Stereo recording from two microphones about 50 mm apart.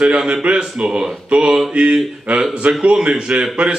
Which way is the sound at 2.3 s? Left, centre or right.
Right.